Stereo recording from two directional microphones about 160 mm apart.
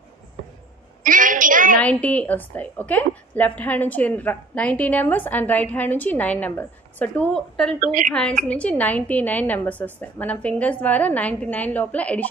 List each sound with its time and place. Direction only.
1.0 s a sound: 55° right (ahead or behind)
1.8 s a woman's voice: 10° left (ahead or behind)
7.8 s a woman's voice: 55° right (ahead or behind)
8.1 s a woman's voice: 5° left (ahead or behind)